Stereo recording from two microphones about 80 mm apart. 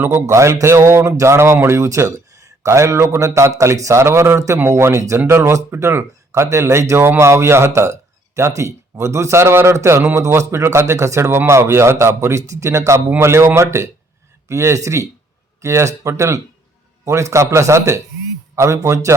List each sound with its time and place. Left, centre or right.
0.0 s speech: right